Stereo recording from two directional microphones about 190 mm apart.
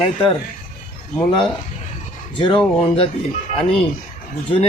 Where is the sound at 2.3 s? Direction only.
25° left (ahead or behind).